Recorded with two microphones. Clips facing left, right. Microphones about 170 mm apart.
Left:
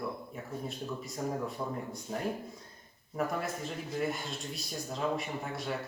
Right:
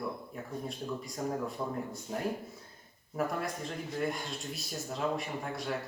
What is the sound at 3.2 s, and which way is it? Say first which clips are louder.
Speech: even; centre (ahead or behind).